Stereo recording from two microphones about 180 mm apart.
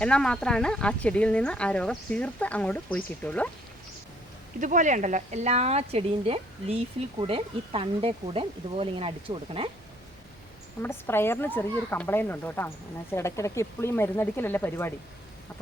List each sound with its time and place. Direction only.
0.0 s speech: 5° left (ahead or behind)
4.6 s a woman's voice: 45° right (ahead or behind); by 9.6 s 30° right (ahead or behind)
10.8 s speech: 15° left (ahead or behind)